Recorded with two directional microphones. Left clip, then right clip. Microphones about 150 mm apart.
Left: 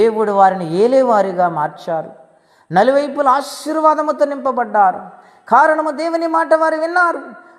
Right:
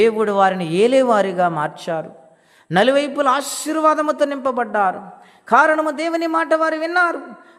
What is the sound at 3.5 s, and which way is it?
A woman's voice, 35° right (ahead or behind).